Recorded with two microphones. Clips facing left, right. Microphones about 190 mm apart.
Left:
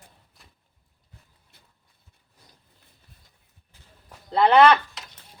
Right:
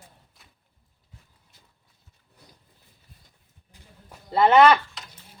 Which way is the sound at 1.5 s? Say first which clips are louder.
Left 1 dB; 60° left (ahead or behind).